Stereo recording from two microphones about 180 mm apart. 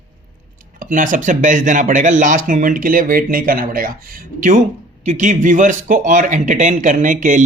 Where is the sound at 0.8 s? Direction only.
45° right (ahead or behind).